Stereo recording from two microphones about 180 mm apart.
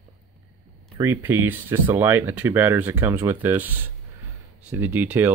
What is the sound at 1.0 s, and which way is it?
Speech, 15° right (ahead or behind).